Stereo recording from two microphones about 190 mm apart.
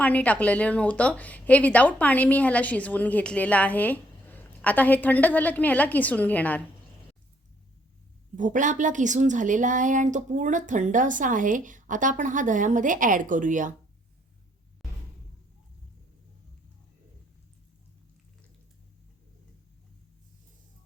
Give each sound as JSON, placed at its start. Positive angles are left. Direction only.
{"t": 0.0, "sound": "a woman's voice", "side_deg": 5}
{"t": 8.4, "sound": "a woman's voice", "side_deg": -40}